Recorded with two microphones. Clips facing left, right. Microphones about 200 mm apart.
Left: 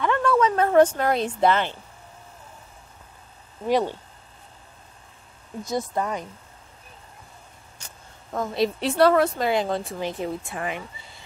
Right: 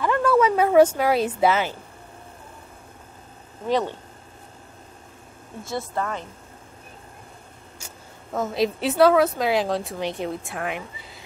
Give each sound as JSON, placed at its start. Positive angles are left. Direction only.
{"t": 0.0, "sound": "speech", "side_deg": -5}
{"t": 3.6, "sound": "a woman's voice", "side_deg": 10}
{"t": 5.6, "sound": "a woman's voice", "side_deg": 15}
{"t": 7.8, "sound": "speech", "side_deg": -5}